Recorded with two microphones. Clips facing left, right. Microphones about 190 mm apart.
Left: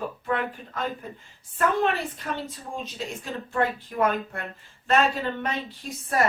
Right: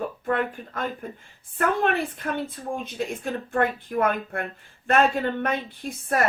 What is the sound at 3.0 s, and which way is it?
A woman's voice, 55° right (ahead or behind).